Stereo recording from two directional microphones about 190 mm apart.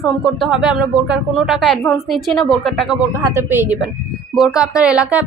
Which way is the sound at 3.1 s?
15° right (ahead or behind).